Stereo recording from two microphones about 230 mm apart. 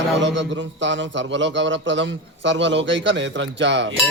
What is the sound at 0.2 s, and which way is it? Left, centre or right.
A man's voice, right.